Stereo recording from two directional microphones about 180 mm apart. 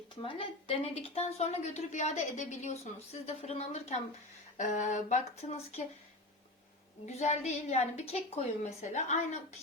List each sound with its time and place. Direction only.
0.2 s a woman's voice: 30° left (ahead or behind)
7.0 s a woman's voice: 40° left (ahead or behind)